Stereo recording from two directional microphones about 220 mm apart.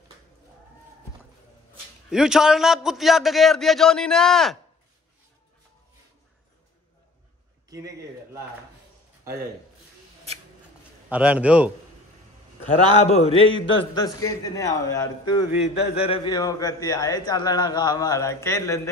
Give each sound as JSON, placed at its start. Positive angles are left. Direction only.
{"t": 2.0, "sound": "a man's voice", "side_deg": 0}
{"t": 7.7, "sound": "a sound", "side_deg": -15}
{"t": 11.1, "sound": "a man's voice", "side_deg": -5}
{"t": 12.9, "sound": "a man's voice", "side_deg": 30}
{"t": 15.6, "sound": "a man's voice", "side_deg": 25}